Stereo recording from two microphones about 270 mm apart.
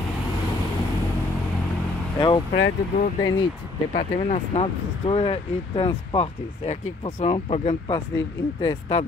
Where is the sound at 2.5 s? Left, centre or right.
Left.